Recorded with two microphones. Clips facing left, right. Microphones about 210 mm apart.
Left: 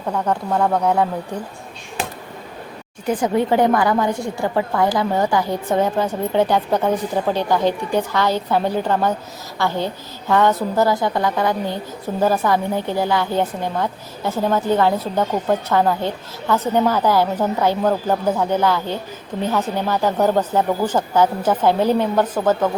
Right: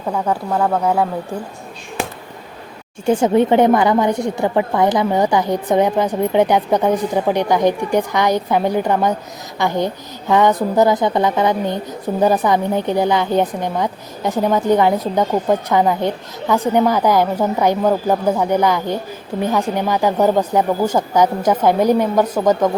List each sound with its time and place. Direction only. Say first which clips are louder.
0.1 s a woman's voice: right 1 dB; 5° right (ahead or behind)
3.1 s a woman's voice: right 5 dB; 25° right (ahead or behind)